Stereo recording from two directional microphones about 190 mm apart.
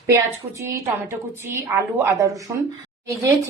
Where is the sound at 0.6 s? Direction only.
15° right (ahead or behind).